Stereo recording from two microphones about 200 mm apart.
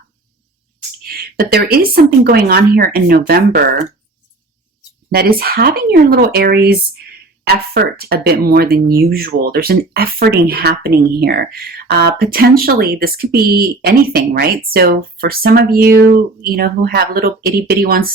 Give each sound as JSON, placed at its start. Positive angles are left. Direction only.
{"t": 1.0, "sound": "speech", "side_deg": -45}
{"t": 5.1, "sound": "speech", "side_deg": -50}